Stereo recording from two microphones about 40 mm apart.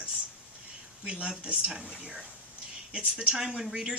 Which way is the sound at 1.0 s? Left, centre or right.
Right.